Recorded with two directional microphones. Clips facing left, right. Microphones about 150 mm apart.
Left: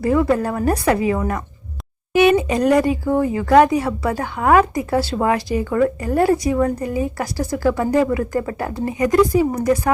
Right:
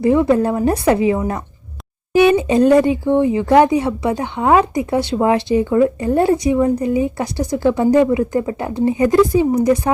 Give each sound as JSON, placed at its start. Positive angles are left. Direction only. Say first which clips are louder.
{"t": 0.0, "sound": "speech", "louder": "right 4 dB", "side_deg": -25}